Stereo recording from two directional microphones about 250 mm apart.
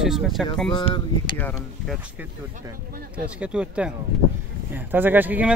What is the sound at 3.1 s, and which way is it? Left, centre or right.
Speech, centre.